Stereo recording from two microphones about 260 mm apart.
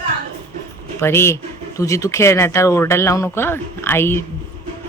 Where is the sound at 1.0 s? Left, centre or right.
Centre.